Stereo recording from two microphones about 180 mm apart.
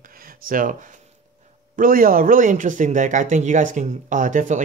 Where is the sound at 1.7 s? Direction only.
50° right (ahead or behind).